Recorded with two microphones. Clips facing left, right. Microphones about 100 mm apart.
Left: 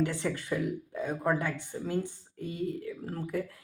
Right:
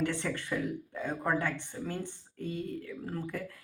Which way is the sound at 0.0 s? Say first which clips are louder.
Left 2 dB; 15° left (ahead or behind).